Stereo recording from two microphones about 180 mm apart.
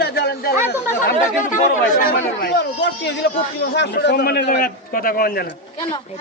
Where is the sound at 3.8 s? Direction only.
70° left (ahead or behind); by 5.3 s 55° left (ahead or behind).